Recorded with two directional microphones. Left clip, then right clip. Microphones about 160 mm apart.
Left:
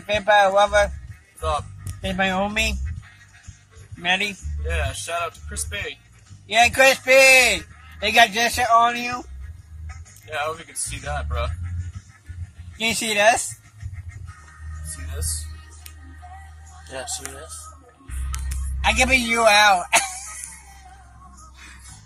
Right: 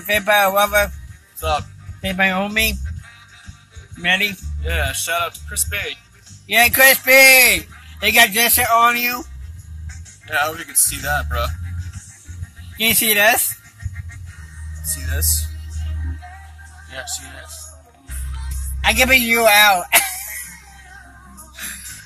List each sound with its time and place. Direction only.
0.0 s a man's voice: 10° right (ahead or behind)
2.0 s speech: 25° right (ahead or behind)
4.0 s speech: 25° right (ahead or behind)
4.6 s speech: centre (ahead or behind)
6.4 s a man's voice: 10° right (ahead or behind)
10.2 s speech: 20° left (ahead or behind)
12.7 s a man's voice: 15° right (ahead or behind)
18.8 s a man's voice: 20° right (ahead or behind)